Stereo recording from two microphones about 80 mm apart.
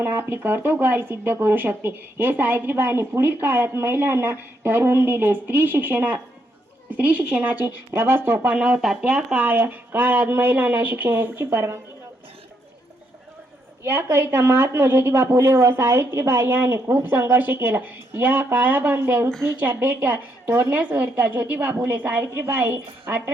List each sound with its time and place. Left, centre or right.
0.0 s speech: right
8.6 s speech: centre; by 11.8 s right
13.8 s a woman's voice: right
19.3 s a woman's voice: centre
19.5 s speech: right